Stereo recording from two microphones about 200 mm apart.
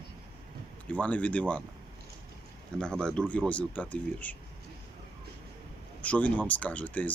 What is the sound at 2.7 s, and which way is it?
Speech, 5° left (ahead or behind).